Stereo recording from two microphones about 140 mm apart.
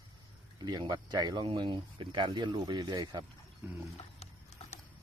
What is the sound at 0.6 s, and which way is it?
Speech, 30° right (ahead or behind).